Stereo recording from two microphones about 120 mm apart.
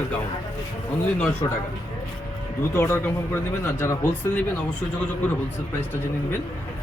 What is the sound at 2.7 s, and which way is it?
Speech, 20° left (ahead or behind).